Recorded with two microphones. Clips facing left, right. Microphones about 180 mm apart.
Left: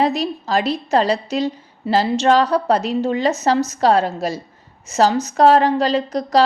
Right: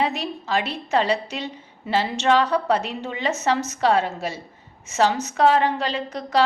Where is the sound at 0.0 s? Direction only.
35° left (ahead or behind).